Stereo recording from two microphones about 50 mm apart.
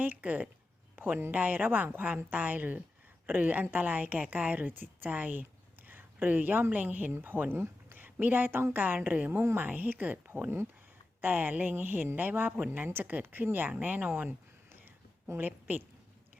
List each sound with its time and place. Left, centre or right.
0.0 s a woman's voice: right
7.1 s a woman's voice: right
14.1 s a sound: right
15.4 s a woman's voice: right